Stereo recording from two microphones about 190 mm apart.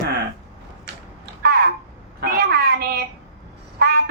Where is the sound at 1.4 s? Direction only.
55° right (ahead or behind).